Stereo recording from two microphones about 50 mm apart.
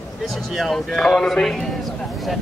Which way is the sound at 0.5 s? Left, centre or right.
Centre.